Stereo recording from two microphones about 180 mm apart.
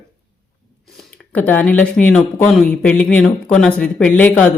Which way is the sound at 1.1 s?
5° left (ahead or behind).